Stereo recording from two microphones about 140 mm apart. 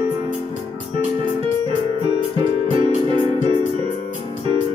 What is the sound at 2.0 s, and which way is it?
Music, 40° right (ahead or behind).